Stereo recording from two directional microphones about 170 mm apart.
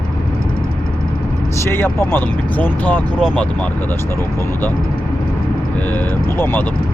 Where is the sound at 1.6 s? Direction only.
15° left (ahead or behind).